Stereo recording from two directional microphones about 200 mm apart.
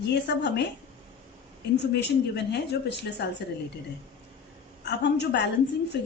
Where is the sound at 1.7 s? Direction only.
55° left (ahead or behind).